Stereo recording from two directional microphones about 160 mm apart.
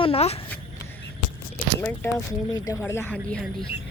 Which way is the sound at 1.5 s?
10° left (ahead or behind).